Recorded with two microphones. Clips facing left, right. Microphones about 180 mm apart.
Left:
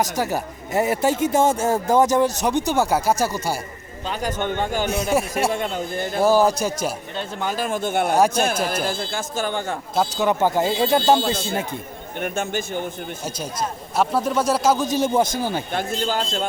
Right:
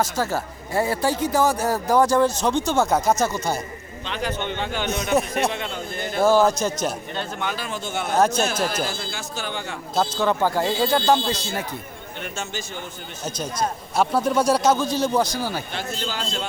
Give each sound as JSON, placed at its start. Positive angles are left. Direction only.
{"t": 0.0, "sound": "a man's voice", "side_deg": 15}
{"t": 4.0, "sound": "a man's voice", "side_deg": 40}
{"t": 5.1, "sound": "a man's voice", "side_deg": 10}
{"t": 7.4, "sound": "a man's voice", "side_deg": 45}
{"t": 8.1, "sound": "a man's voice", "side_deg": 10}
{"t": 8.7, "sound": "a man's voice", "side_deg": 50}
{"t": 9.9, "sound": "speech", "side_deg": 15}
{"t": 12.2, "sound": "a man's voice", "side_deg": 55}
{"t": 13.9, "sound": "a man's voice", "side_deg": 0}
{"t": 14.8, "sound": "speech", "side_deg": 20}
{"t": 15.7, "sound": "a man's voice", "side_deg": 50}